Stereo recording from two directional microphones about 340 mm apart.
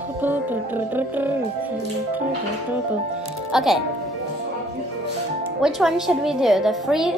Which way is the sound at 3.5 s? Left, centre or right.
Centre.